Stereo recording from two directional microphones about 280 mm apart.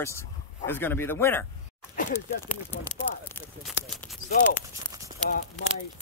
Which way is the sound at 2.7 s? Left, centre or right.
Centre.